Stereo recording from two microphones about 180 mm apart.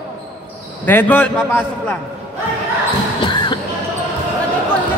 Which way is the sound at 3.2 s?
25° left (ahead or behind).